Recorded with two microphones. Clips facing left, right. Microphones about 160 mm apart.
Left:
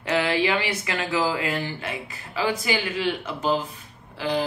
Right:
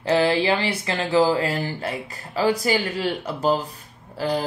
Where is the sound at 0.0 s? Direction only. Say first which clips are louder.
Right 4 dB; 30° right (ahead or behind).